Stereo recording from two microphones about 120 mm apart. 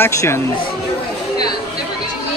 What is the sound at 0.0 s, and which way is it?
Speech, 20° left (ahead or behind).